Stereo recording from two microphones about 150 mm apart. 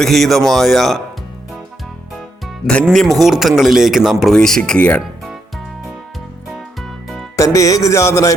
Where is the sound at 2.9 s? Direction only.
Centre (ahead or behind).